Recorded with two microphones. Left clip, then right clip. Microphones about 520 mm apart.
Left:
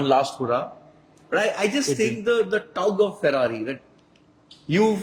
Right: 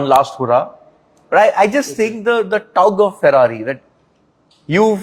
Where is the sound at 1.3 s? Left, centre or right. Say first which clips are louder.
Right 11 dB; right.